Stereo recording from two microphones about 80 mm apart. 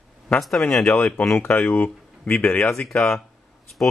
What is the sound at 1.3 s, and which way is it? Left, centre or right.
Speech, left.